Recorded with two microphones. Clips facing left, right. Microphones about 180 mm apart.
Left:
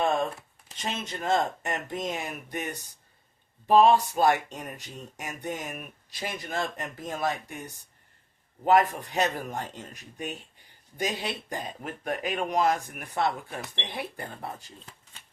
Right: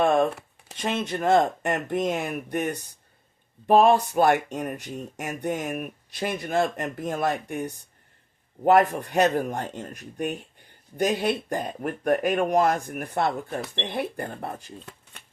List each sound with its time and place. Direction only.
0.0 s speech: 60° right (ahead or behind)